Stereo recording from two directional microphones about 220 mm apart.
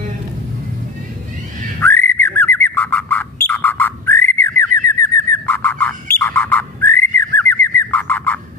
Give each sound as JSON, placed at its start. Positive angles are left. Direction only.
{"t": 1.8, "sound": "bird", "side_deg": 10}